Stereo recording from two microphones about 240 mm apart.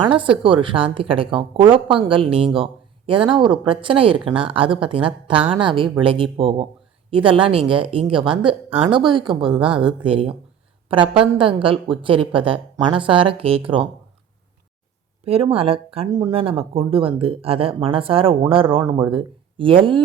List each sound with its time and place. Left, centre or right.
0.1 s speech: right
15.2 s speech: right